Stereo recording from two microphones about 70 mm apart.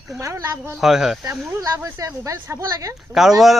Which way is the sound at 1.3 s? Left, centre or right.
Right.